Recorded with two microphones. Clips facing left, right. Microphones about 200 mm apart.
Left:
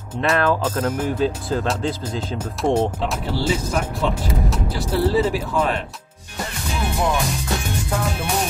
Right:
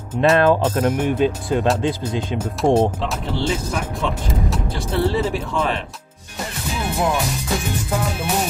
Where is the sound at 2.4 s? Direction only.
5° right (ahead or behind).